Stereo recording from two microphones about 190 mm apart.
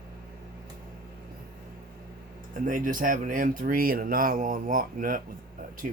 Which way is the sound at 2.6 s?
45° right (ahead or behind).